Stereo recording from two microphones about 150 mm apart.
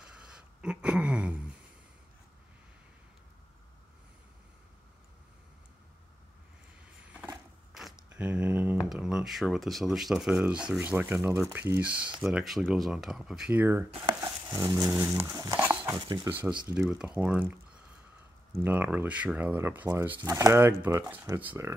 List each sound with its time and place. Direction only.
0.0 s a sound: 5° right (ahead or behind)
7.7 s a sound: 5° right (ahead or behind)
8.8 s speech: 5° right (ahead or behind)
14.0 s dog: 25° right (ahead or behind)
15.6 s a sound: 10° right (ahead or behind)
15.9 s dog: 25° right (ahead or behind)
16.8 s speech: 5° right (ahead or behind)
20.2 s dog: 25° right (ahead or behind)
21.0 s speech: 10° right (ahead or behind)